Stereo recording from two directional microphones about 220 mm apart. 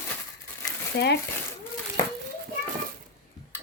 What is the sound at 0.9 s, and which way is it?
Speech, 50° left (ahead or behind).